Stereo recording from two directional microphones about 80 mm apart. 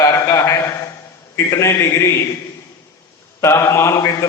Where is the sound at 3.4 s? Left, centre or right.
Left.